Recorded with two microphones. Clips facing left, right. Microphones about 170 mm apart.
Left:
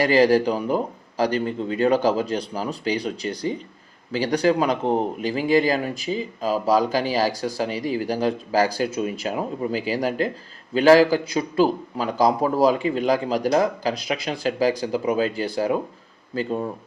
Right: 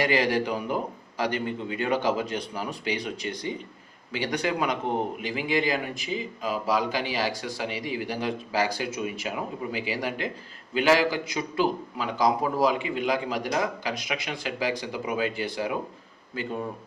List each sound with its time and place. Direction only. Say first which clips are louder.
0.0 s a man's voice: left 7 dB; 35° left (ahead or behind)